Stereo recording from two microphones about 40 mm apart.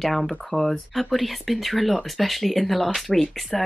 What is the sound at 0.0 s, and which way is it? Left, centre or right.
Speech, centre.